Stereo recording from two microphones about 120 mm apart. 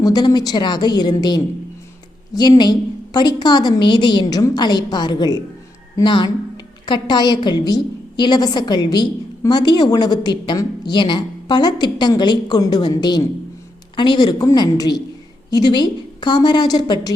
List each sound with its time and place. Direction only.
0.0 s a woman's voice: 30° left (ahead or behind)